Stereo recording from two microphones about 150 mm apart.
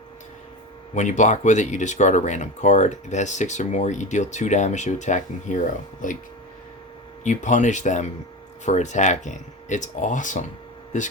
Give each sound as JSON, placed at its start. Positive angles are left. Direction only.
{"t": 0.9, "sound": "speech", "side_deg": 55}
{"t": 7.3, "sound": "speech", "side_deg": 55}